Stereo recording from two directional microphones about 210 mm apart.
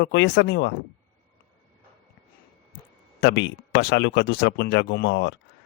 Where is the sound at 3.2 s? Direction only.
55° left (ahead or behind).